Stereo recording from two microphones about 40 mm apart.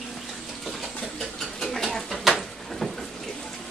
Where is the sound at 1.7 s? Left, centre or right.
Centre.